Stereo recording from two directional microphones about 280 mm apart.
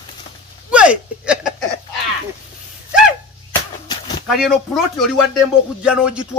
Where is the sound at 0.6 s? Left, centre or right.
Centre.